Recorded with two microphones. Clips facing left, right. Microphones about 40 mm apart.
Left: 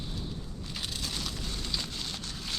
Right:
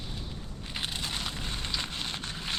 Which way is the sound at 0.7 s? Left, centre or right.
Right.